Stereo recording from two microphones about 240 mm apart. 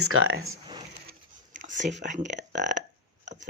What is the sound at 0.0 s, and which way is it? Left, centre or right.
Speech, right.